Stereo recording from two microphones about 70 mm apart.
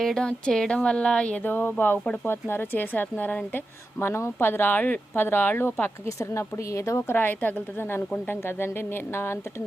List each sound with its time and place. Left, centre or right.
0.0 s speech: centre
1.5 s speech: left
4.0 s speech: left
6.1 s a woman's voice: left
7.1 s speech: left